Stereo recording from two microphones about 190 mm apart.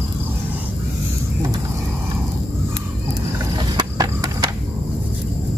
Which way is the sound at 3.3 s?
25° right (ahead or behind).